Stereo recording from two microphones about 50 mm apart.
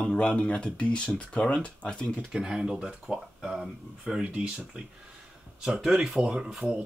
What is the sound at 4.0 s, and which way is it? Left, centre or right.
Speech, right.